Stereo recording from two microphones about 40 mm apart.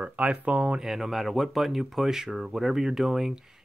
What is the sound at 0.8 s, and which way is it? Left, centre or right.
Speech, centre.